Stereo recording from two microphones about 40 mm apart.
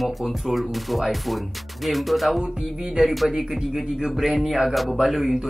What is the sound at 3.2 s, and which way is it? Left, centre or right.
Speech, centre.